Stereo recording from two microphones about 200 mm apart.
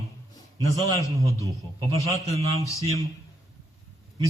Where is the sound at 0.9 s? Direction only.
15° left (ahead or behind).